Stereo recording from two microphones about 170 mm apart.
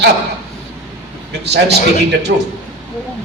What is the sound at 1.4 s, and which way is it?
Speech, 80° right.